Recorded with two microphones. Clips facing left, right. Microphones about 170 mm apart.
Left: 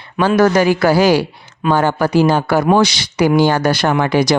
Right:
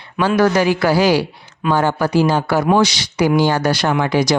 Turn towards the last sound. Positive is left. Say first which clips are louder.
# left 2 dB
turn(degrees=55)  # may be behind; listen again after turning